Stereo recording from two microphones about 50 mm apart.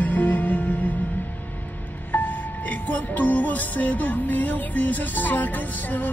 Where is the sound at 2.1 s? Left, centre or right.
Left.